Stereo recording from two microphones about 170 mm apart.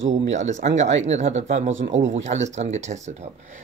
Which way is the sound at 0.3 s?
45° right (ahead or behind).